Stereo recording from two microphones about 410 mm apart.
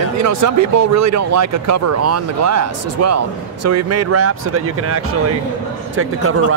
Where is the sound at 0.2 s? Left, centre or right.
Right.